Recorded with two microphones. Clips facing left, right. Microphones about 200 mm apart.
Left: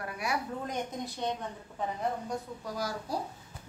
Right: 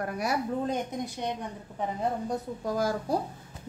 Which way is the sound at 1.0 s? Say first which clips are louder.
Right 1 dB; 15° right (ahead or behind).